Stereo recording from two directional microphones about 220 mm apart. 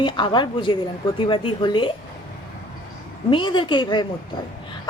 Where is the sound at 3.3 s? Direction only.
20° left (ahead or behind).